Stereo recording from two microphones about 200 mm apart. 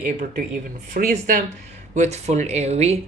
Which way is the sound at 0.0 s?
40° right (ahead or behind).